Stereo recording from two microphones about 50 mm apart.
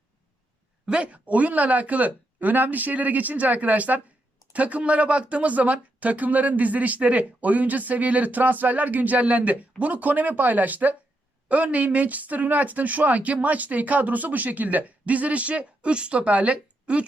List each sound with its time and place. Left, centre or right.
0.9 s speech: right